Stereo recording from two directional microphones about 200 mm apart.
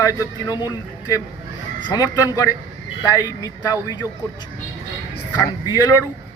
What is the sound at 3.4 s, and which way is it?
Speech, 20° left (ahead or behind).